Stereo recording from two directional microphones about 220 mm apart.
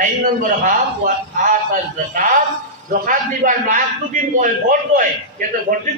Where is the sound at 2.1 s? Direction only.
35° right (ahead or behind).